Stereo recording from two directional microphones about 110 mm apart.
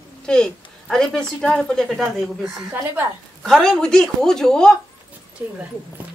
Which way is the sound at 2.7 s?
20° right (ahead or behind).